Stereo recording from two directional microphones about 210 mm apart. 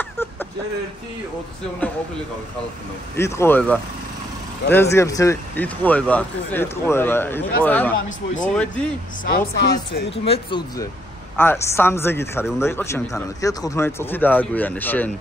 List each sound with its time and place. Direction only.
3.2 s speech: 15° left (ahead or behind)
9.6 s speech: 50° left (ahead or behind)
10.1 s speech: 30° left (ahead or behind)
11.3 s speech: 10° left (ahead or behind)